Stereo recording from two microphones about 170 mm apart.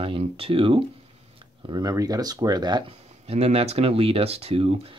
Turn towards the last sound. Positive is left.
turn(degrees=-35)  # may be behind; listen again after turning